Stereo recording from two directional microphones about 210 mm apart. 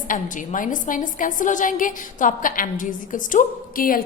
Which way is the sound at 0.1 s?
40° left (ahead or behind).